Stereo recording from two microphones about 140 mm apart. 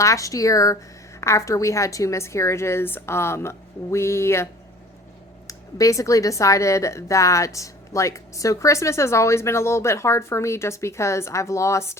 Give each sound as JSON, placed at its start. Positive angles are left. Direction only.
{"t": 0.0, "sound": "speech", "side_deg": 20}
{"t": 5.5, "sound": "speech", "side_deg": 25}